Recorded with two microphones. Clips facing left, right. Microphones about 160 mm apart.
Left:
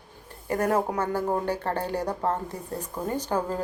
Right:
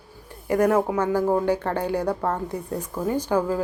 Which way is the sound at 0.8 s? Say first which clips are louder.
Right 4 dB; 10° right (ahead or behind).